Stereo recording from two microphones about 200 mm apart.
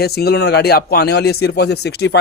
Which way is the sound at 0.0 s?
50° left (ahead or behind).